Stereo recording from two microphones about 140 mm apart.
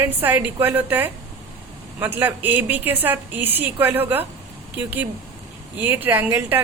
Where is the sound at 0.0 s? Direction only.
15° right (ahead or behind).